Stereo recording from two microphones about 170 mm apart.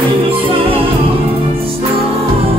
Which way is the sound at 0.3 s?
30° right (ahead or behind).